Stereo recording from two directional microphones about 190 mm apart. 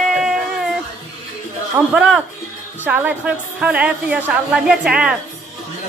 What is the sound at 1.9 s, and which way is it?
A woman's voice, 5° right (ahead or behind).